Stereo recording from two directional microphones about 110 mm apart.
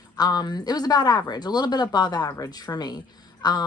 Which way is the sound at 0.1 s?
35° left (ahead or behind).